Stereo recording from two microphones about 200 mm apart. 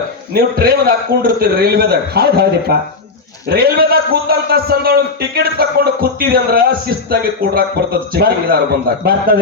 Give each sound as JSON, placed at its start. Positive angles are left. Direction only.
{"t": 0.3, "sound": "a man's voice", "side_deg": -50}